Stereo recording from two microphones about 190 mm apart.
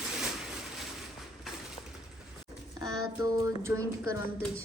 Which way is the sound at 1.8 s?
35° left (ahead or behind).